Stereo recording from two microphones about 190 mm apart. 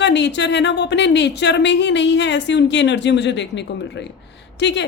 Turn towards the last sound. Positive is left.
turn(degrees=70)  # may be behind; listen again after turning